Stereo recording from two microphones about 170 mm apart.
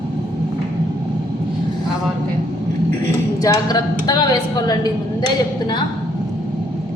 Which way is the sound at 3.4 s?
20° left (ahead or behind).